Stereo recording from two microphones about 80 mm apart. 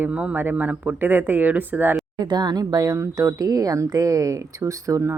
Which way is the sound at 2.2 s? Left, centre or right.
Right.